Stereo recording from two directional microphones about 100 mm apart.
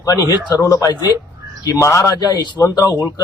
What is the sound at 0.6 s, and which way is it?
Speech, 30° left (ahead or behind).